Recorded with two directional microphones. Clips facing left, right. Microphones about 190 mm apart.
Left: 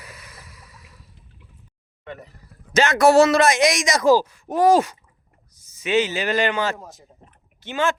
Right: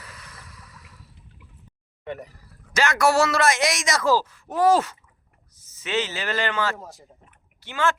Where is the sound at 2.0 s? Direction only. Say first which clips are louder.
Right 3 dB; 15° right (ahead or behind).